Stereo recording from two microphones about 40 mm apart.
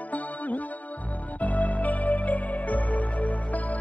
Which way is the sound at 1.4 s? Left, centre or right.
Left.